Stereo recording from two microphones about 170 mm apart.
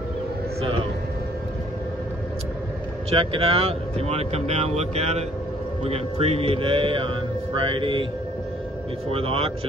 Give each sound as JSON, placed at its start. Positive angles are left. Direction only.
{"t": 0.6, "sound": "a sound", "side_deg": -30}
{"t": 3.1, "sound": "speech", "side_deg": -35}
{"t": 9.1, "sound": "speech", "side_deg": -35}